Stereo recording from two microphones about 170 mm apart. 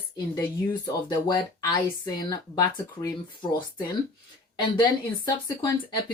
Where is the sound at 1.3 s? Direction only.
25° left (ahead or behind).